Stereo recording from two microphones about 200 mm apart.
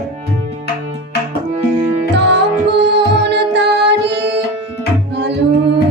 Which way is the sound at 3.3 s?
60° right (ahead or behind).